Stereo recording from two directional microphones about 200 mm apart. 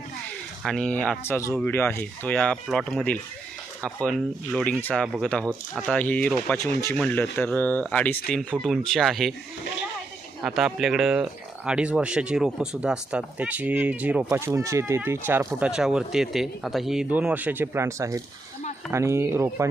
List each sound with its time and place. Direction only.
0.6 s speech: 5° left (ahead or behind)
5.0 s speech: 5° right (ahead or behind)
5.7 s speech: 5° left (ahead or behind)
6.6 s speech: 15° left (ahead or behind)
10.4 s speech: centre (ahead or behind)